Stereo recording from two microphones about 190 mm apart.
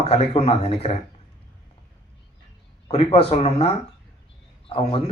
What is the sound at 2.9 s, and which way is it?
Speech, 30° left (ahead or behind).